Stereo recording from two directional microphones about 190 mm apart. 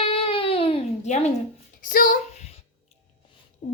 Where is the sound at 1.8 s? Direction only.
45° left (ahead or behind).